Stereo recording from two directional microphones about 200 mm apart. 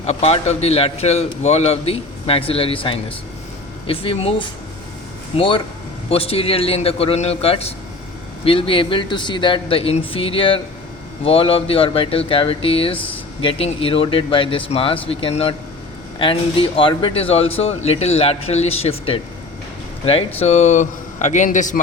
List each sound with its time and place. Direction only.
0.0 s a man's voice: 30° left (ahead or behind)